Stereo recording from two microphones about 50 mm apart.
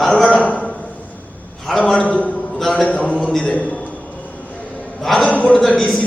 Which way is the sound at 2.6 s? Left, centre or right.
Centre.